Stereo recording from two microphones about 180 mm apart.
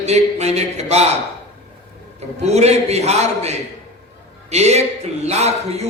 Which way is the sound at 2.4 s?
35° right (ahead or behind).